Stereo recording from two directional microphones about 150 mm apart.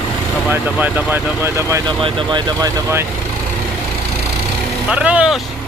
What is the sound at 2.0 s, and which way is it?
Speech, 35° right (ahead or behind).